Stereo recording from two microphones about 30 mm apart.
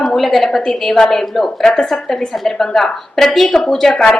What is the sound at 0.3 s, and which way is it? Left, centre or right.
A woman's voice, centre.